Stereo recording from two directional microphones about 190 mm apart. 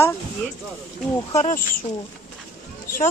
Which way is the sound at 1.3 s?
40° left (ahead or behind).